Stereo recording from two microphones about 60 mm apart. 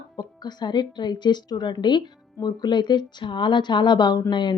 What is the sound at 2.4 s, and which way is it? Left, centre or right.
Speech, left.